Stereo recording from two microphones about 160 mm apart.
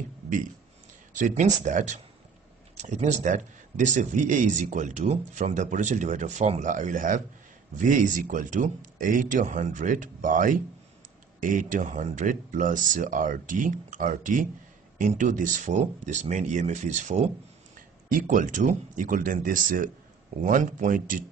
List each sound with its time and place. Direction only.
1.1 s speech: 50° right (ahead or behind)